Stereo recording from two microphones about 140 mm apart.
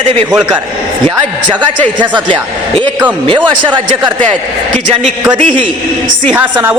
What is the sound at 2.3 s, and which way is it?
A man's voice, 35° right (ahead or behind).